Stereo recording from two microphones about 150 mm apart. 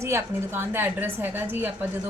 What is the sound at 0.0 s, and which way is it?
A woman's voice, 15° right (ahead or behind).